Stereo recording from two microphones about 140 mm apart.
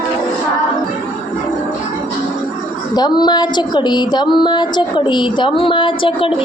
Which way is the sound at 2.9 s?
30° left (ahead or behind).